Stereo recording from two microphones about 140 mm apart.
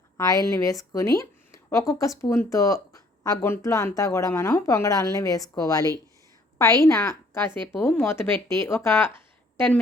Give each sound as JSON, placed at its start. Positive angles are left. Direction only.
{"t": 0.2, "sound": "a woman's voice", "side_deg": 25}
{"t": 6.8, "sound": "a woman's voice", "side_deg": 20}